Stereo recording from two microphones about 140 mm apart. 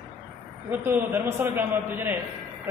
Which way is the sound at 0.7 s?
15° right (ahead or behind).